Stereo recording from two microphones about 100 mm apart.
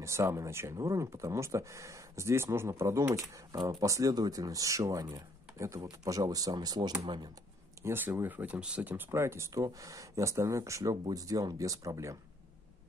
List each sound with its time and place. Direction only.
0.0 s speech: 30° right (ahead or behind)
7.8 s speech: 20° right (ahead or behind)